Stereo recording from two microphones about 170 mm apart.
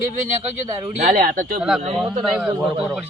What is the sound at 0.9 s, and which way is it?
Speech, 45° right (ahead or behind).